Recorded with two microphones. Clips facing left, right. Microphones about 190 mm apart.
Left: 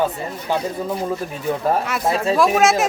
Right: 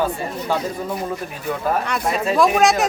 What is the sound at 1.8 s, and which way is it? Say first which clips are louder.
Speech: left 1 dB; 5° left (ahead or behind).